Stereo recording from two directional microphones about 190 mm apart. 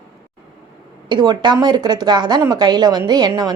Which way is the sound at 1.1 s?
25° right (ahead or behind).